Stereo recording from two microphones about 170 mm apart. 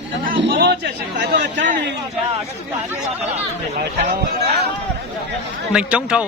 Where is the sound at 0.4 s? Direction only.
85° right.